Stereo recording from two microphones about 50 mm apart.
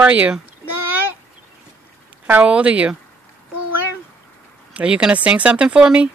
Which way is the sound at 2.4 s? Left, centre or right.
Right.